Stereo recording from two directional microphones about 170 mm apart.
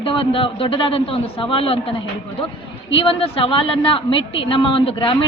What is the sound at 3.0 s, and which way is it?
A woman's voice, 30° left (ahead or behind).